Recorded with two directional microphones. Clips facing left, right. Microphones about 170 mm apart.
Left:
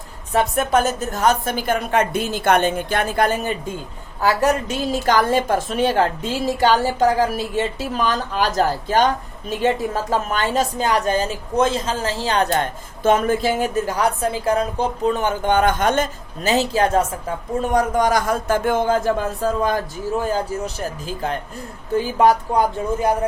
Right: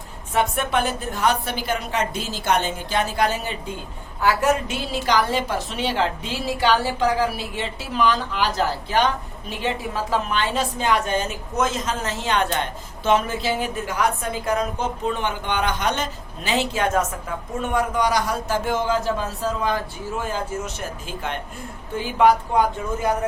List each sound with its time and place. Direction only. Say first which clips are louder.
0.3 s a woman's voice: left 4 dB; 40° left (ahead or behind)
4.2 s a woman's voice: left 2 dB; 35° left (ahead or behind)